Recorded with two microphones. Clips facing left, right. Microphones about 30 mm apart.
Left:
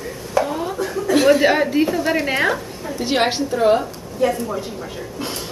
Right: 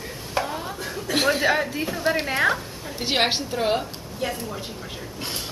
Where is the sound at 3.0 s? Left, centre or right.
Centre.